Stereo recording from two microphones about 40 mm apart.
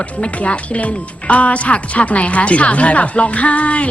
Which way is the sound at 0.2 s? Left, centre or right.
Left.